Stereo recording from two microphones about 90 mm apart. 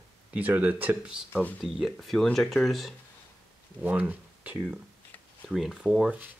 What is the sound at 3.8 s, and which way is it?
Speech, 20° right (ahead or behind).